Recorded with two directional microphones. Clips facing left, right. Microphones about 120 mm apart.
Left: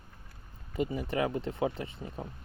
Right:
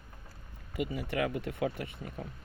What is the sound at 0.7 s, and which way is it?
Speech, 30° left (ahead or behind).